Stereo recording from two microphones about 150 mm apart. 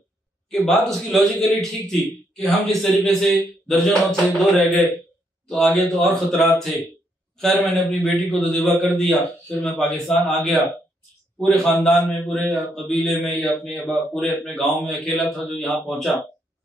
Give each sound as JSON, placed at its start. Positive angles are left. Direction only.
{"t": 0.5, "sound": "a man's voice", "side_deg": 0}
{"t": 5.5, "sound": "a man's voice", "side_deg": 5}